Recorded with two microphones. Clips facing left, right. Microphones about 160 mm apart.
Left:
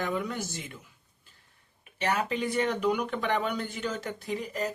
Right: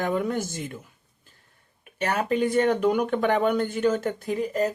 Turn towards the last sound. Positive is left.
turn(degrees=-45)  # may be behind; listen again after turning